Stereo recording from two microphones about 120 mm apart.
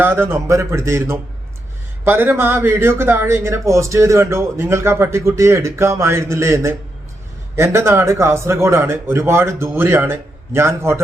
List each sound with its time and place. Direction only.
0.0 s speech: 20° right (ahead or behind)